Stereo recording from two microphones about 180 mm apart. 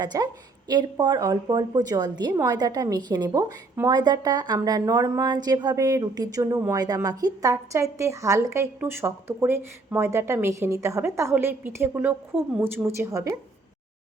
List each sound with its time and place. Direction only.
0.0 s a woman's voice: 20° right (ahead or behind)